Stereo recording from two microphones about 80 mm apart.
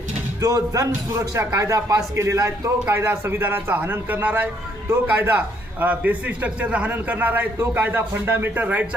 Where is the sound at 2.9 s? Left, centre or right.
Right.